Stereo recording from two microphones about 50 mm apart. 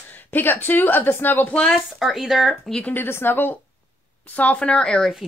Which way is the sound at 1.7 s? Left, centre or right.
Centre.